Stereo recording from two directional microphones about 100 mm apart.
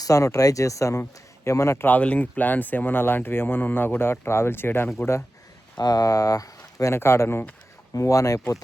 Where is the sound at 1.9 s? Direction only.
15° left (ahead or behind).